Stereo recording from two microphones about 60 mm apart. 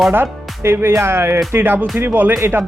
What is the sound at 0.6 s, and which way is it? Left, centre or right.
Speech, right.